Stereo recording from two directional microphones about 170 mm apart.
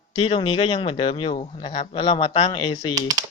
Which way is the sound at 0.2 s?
35° left (ahead or behind).